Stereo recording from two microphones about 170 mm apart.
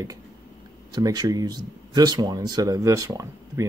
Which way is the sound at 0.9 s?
25° right (ahead or behind).